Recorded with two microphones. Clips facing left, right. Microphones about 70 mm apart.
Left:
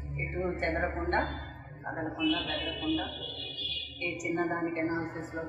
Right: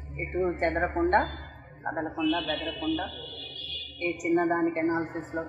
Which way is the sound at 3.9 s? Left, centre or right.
Right.